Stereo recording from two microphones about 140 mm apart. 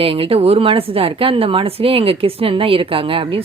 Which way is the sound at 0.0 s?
40° right (ahead or behind).